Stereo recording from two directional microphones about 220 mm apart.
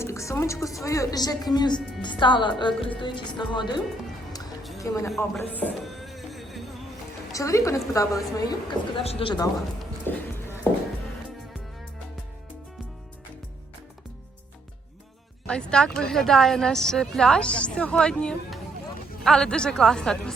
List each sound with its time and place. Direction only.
0.0 s a woman's voice: 15° left (ahead or behind)
4.8 s a woman's voice: 15° left (ahead or behind)
5.4 s a sound: 5° left (ahead or behind)
7.3 s a woman's voice: 15° left (ahead or behind)
10.1 s a sound: 10° left (ahead or behind)
15.4 s a woman's voice: 5° left (ahead or behind)